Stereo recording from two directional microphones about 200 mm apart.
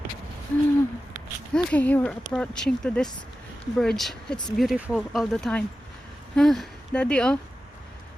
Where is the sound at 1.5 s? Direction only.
5° left (ahead or behind).